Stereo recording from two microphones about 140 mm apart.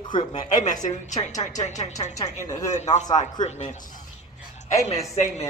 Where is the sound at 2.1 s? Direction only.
25° left (ahead or behind).